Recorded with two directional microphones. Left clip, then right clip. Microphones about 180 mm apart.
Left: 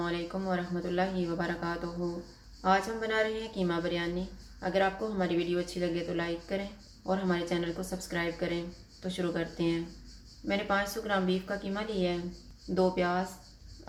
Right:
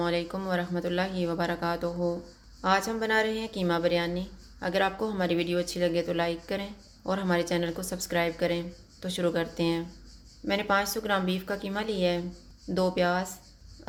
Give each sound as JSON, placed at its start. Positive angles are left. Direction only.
{"t": 0.0, "sound": "speech", "side_deg": -55}